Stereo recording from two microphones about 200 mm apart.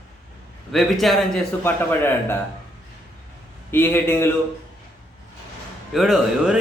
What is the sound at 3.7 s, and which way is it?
Speech, 10° left (ahead or behind).